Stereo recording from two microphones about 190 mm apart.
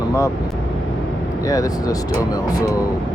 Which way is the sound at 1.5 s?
20° left (ahead or behind).